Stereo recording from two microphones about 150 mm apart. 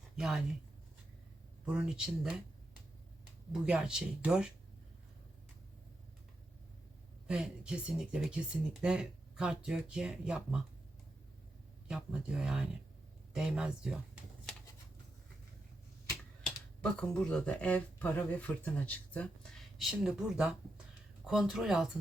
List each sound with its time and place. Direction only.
0.2 s speech: 5° right (ahead or behind)
1.6 s speech: 5° right (ahead or behind)
3.5 s speech: 5° right (ahead or behind)
7.3 s speech: 5° right (ahead or behind)
11.9 s speech: 5° right (ahead or behind)
16.8 s speech: 5° left (ahead or behind)